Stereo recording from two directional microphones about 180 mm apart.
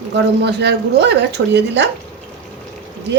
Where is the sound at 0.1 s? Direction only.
70° right (ahead or behind).